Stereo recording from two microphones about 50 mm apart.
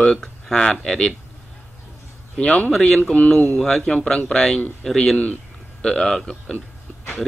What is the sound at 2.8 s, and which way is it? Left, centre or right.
Speech, centre.